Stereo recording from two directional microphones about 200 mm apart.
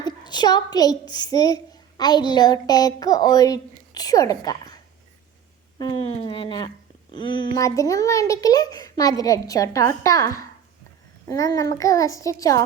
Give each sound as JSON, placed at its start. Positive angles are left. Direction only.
{"t": 0.0, "sound": "a woman's voice", "side_deg": 20}
{"t": 6.2, "sound": "a child's voice", "side_deg": 20}